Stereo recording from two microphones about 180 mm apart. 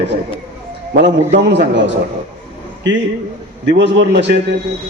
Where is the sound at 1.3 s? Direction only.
70° right (ahead or behind).